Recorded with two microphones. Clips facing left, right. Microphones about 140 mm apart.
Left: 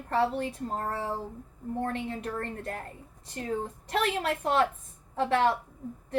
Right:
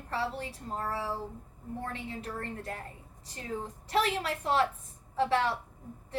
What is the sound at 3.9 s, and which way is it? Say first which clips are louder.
A woman's voice: left 1 dB; 50° left (ahead or behind).